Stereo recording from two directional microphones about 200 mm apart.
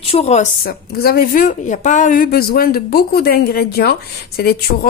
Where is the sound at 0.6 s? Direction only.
50° left (ahead or behind).